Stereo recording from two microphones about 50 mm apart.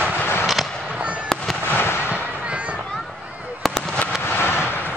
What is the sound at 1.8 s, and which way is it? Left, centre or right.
Fireworks, left.